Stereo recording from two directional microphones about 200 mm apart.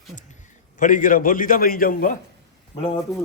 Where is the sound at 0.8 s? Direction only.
40° left (ahead or behind).